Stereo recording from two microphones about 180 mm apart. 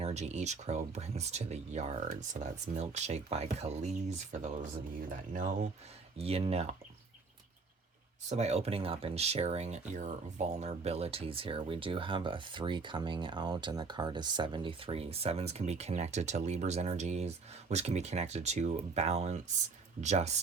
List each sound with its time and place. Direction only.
0.0 s speech: 40° right (ahead or behind)
6.1 s speech: 35° right (ahead or behind)
8.3 s speech: 35° right (ahead or behind)